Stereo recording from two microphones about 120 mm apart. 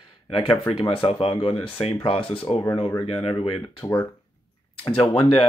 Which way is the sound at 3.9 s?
20° left (ahead or behind).